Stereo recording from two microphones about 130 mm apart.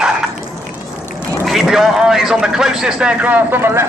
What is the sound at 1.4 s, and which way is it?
A man's voice, 5° right (ahead or behind).